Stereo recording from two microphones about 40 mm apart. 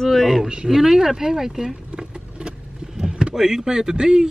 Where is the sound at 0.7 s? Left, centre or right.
Centre.